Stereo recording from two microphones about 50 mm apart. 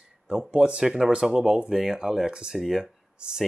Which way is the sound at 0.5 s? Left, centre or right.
Centre.